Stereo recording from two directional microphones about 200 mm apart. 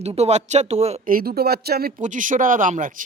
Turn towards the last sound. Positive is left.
turn(degrees=-40)  # may be behind; listen again after turning